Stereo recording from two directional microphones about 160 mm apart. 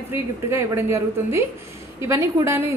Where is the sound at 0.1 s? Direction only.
15° right (ahead or behind).